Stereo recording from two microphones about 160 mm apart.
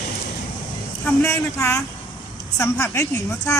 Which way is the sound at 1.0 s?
15° left (ahead or behind).